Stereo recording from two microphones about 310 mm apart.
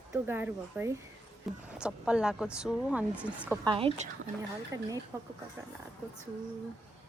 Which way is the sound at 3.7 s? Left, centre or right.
Centre.